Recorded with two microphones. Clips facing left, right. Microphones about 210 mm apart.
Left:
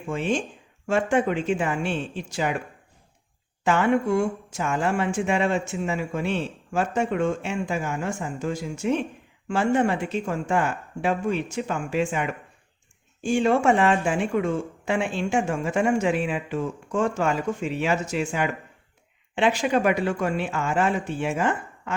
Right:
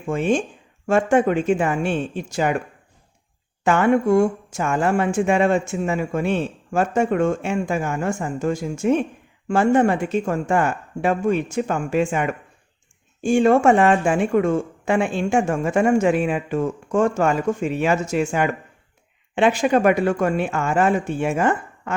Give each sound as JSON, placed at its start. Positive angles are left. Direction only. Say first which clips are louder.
{"t": 0.1, "sound": "speech", "louder": "right 5 dB", "side_deg": -50}
{"t": 3.6, "sound": "speech", "louder": "right 4 dB", "side_deg": -50}